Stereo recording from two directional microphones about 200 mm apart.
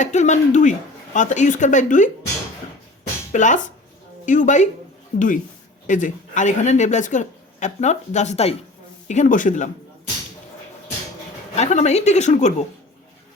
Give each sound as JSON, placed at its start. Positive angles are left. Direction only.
{"t": 0.0, "sound": "speech", "side_deg": 35}
{"t": 3.3, "sound": "speech", "side_deg": 40}
{"t": 11.5, "sound": "speech", "side_deg": 35}